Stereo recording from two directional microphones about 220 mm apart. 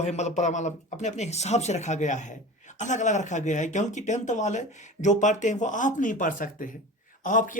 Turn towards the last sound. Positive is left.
turn(degrees=35)  # may be behind; listen again after turning